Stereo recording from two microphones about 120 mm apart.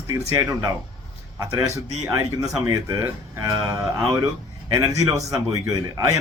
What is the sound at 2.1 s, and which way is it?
Speech, 30° right (ahead or behind).